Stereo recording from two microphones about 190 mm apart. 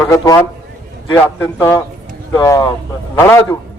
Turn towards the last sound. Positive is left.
turn(degrees=15)  # may be behind; listen again after turning